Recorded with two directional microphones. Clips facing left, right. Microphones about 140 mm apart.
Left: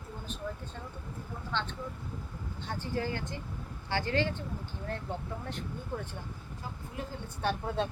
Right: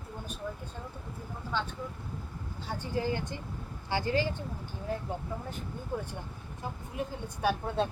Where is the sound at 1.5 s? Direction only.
10° right (ahead or behind).